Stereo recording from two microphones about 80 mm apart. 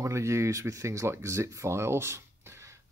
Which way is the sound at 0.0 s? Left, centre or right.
Right.